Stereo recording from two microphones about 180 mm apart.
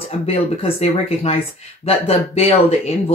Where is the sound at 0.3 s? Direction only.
35° left (ahead or behind).